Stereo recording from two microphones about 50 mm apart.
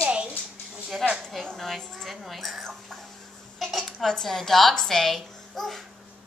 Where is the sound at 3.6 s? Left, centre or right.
Centre.